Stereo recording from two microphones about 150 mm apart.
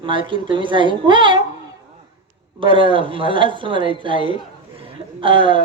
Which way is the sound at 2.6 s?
35° right (ahead or behind).